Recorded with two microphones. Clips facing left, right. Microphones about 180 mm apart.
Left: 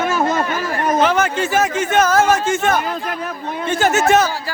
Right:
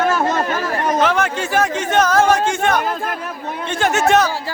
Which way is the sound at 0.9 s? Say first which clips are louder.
Left 2 dB; centre (ahead or behind).